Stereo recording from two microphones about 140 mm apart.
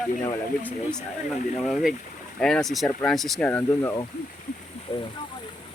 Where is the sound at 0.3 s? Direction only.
10° left (ahead or behind).